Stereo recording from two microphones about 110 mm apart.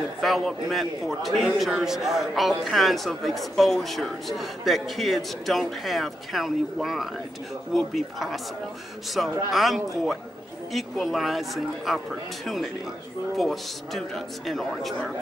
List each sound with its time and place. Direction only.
0.2 s a man's voice: centre (ahead or behind)
13.4 s a man's voice: centre (ahead or behind)